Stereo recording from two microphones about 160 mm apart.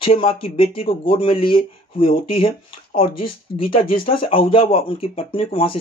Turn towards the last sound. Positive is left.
turn(degrees=35)  # may be behind; listen again after turning